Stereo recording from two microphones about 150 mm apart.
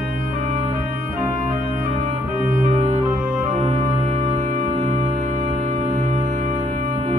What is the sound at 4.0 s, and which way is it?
Music, 45° right (ahead or behind).